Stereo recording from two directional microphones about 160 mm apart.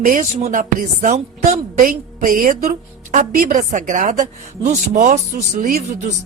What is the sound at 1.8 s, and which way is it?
A woman's voice, 60° right (ahead or behind).